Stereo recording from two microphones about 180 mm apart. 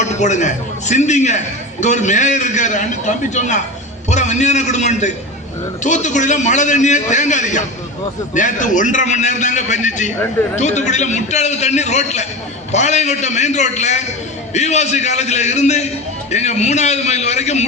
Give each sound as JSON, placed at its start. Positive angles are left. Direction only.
{"t": 0.2, "sound": "a man's voice", "side_deg": 40}